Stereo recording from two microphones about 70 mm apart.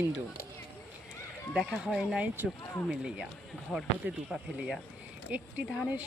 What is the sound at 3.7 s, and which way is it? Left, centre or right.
Speech, centre.